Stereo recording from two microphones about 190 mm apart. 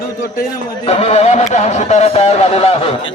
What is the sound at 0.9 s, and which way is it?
Speech, 35° left (ahead or behind).